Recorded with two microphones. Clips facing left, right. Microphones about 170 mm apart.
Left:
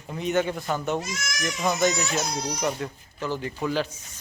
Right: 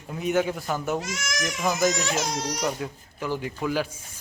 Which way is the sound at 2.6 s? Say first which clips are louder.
Even; 10° right (ahead or behind).